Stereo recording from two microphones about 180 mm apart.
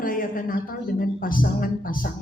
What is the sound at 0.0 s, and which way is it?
A woman's voice, 50° left (ahead or behind).